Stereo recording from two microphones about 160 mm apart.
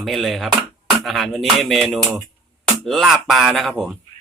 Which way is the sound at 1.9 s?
10° right (ahead or behind).